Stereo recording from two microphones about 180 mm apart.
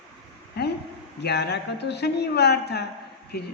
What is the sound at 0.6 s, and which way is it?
A man's voice, 65° left (ahead or behind).